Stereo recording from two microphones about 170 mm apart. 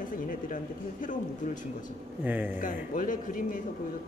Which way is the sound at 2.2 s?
10° right (ahead or behind).